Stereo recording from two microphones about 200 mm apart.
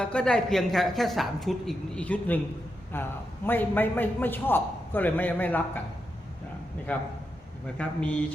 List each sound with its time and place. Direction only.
0.0 s a woman's voice: 5° left (ahead or behind)
6.9 s a man's voice: 10° left (ahead or behind)